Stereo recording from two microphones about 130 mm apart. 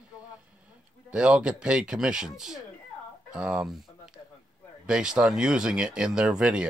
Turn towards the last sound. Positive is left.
turn(degrees=-5)  # may be behind; listen again after turning